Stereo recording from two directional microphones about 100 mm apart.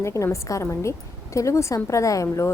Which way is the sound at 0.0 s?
30° left (ahead or behind).